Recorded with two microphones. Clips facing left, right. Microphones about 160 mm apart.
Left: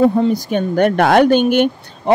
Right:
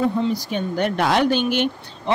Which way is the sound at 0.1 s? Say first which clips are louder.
Left 7 dB; 50° left (ahead or behind).